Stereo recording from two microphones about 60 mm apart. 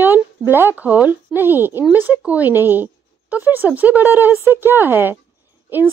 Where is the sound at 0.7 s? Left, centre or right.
Right.